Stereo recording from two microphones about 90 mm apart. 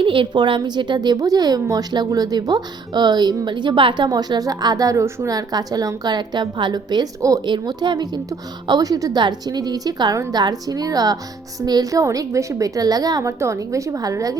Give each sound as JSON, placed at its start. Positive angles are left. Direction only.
{"t": 0.0, "sound": "a woman's voice", "side_deg": -70}
{"t": 7.4, "sound": "a woman's voice", "side_deg": -55}